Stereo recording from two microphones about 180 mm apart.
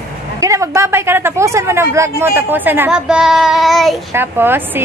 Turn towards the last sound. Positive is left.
turn(degrees=-10)  # may be behind; listen again after turning